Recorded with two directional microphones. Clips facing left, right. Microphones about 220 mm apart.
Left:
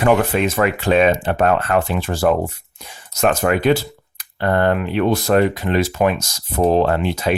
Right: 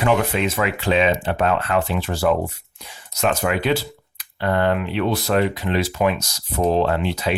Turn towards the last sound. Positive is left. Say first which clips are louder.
# left 3 dB
turn(degrees=50)  # may be behind; listen again after turning